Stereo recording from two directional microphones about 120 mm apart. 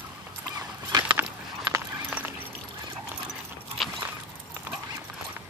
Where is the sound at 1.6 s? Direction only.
25° right (ahead or behind).